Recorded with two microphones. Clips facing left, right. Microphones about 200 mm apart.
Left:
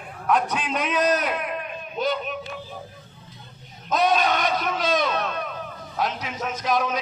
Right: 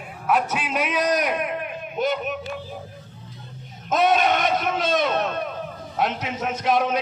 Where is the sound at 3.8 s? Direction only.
25° right (ahead or behind).